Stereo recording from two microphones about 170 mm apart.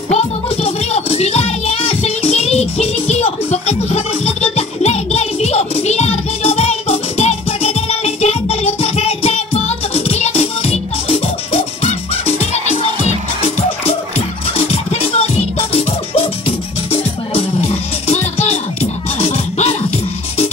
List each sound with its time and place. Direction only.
0.1 s music: 35° left (ahead or behind)